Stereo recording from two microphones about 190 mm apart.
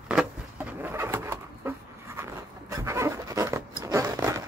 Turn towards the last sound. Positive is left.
turn(degrees=-15)  # may be behind; listen again after turning